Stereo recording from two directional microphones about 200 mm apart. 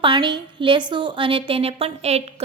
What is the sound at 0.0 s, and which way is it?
A woman's voice, 25° right (ahead or behind).